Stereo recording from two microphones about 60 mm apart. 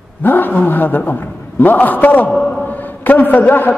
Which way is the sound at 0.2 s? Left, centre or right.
Left.